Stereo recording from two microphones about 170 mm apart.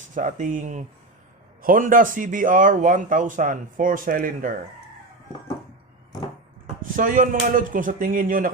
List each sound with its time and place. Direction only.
0.1 s speech: 50° right (ahead or behind)
6.9 s speech: 55° right (ahead or behind)